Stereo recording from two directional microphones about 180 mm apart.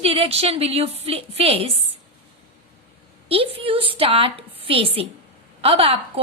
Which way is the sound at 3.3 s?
30° right (ahead or behind).